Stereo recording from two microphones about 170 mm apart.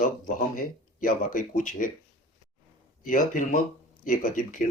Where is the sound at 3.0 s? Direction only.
50° left (ahead or behind).